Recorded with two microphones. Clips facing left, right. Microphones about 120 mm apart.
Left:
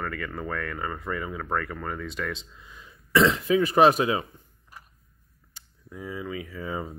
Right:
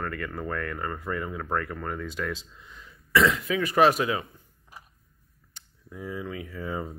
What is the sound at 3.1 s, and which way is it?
Speech, 30° left (ahead or behind).